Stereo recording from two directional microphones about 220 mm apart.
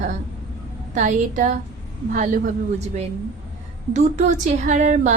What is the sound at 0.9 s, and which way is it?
A woman's voice, 35° right (ahead or behind).